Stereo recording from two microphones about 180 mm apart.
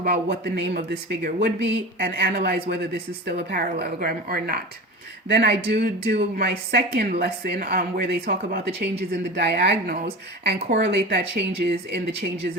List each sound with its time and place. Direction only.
0.0 s speech: 65° right (ahead or behind)
5.3 s speech: 65° right (ahead or behind)